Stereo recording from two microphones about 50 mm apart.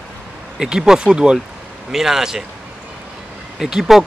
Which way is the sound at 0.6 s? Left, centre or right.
Centre.